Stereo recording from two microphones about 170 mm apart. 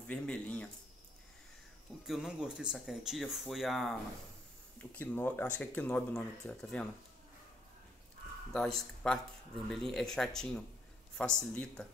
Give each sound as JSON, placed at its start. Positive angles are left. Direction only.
{"t": 0.0, "sound": "speech", "side_deg": 5}
{"t": 2.0, "sound": "speech", "side_deg": -5}
{"t": 4.9, "sound": "speech", "side_deg": 10}
{"t": 8.5, "sound": "speech", "side_deg": 5}